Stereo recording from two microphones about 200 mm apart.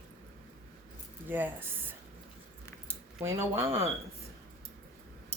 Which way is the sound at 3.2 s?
15° right (ahead or behind).